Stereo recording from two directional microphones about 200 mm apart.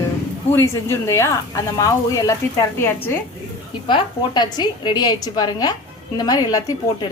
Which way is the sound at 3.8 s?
20° left (ahead or behind).